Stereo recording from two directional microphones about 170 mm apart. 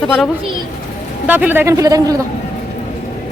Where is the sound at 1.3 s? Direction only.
10° right (ahead or behind).